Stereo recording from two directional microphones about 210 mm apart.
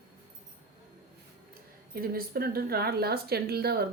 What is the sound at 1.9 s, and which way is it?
Speech, 45° right (ahead or behind).